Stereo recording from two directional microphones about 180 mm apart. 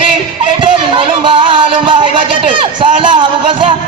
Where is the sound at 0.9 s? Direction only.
30° right (ahead or behind).